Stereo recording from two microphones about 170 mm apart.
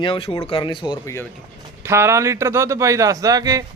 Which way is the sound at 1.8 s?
15° right (ahead or behind).